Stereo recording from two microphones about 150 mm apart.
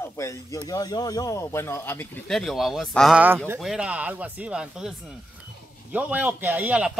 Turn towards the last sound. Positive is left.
turn(degrees=-10)  # may be behind; listen again after turning